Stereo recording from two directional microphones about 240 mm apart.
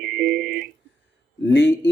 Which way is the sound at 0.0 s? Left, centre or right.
Right.